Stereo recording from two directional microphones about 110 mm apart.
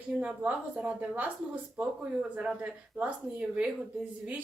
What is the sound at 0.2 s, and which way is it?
A woman's voice, 15° right (ahead or behind).